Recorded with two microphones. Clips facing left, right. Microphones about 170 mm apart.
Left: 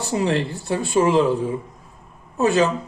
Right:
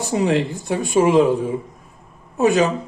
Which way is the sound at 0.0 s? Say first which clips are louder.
Right 3 dB; 15° right (ahead or behind).